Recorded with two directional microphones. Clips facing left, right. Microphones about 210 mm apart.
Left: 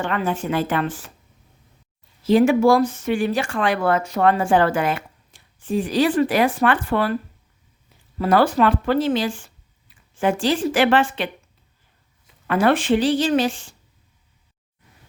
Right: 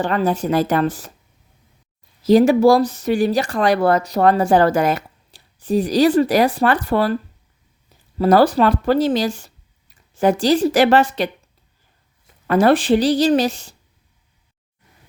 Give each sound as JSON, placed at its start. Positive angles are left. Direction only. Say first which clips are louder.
{"t": 0.0, "sound": "speech", "louder": "right 4 dB", "side_deg": -35}
{"t": 2.2, "sound": "speech", "louder": "right 3 dB", "side_deg": -40}
{"t": 8.2, "sound": "speech", "louder": "right 3 dB", "side_deg": -40}
{"t": 12.5, "sound": "speech", "louder": "right 4 dB", "side_deg": -40}